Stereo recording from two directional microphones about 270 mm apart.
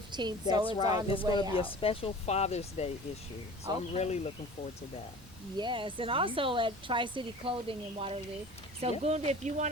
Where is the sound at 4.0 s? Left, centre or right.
Left.